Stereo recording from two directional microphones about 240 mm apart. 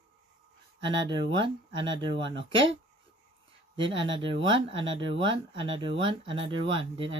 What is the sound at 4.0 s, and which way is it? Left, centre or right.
Speech, right.